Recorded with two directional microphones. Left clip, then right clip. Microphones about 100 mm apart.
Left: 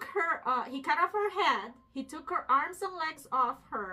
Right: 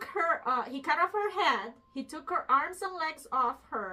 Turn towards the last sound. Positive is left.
turn(degrees=25)  # may be behind; listen again after turning